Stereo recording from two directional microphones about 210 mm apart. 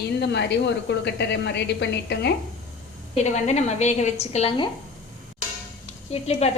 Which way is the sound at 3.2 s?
35° left (ahead or behind).